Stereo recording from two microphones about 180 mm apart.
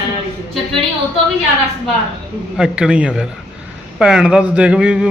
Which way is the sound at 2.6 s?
5° right (ahead or behind).